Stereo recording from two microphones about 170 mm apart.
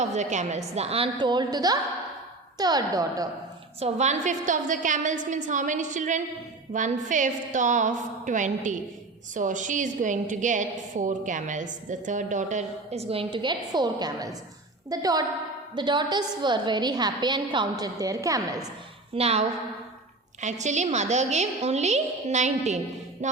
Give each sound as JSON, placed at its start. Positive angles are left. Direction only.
{"t": 0.0, "sound": "a woman's voice", "side_deg": -45}
{"t": 3.8, "sound": "a woman's voice", "side_deg": -40}
{"t": 19.1, "sound": "a woman's voice", "side_deg": -35}
{"t": 23.2, "sound": "music", "side_deg": -45}